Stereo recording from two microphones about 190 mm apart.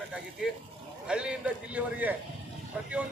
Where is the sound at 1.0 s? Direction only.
5° right (ahead or behind).